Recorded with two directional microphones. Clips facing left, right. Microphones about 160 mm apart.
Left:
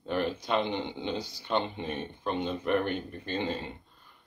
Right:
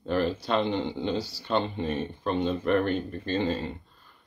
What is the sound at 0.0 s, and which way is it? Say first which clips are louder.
Speech: right 4 dB; 15° left (ahead or behind).